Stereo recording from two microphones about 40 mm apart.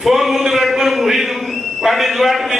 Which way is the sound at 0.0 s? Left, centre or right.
Centre.